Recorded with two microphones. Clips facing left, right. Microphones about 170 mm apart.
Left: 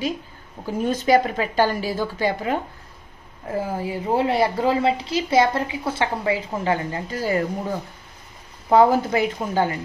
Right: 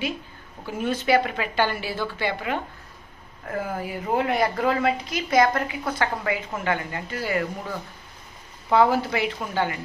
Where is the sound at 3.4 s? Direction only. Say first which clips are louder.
Left 3 dB; 25° left (ahead or behind).